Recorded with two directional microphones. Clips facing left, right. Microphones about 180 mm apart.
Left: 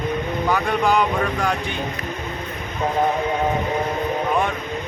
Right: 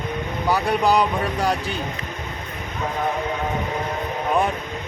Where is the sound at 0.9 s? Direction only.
35° right (ahead or behind).